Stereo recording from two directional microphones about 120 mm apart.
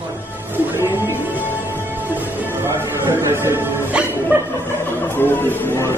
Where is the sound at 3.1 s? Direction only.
20° right (ahead or behind).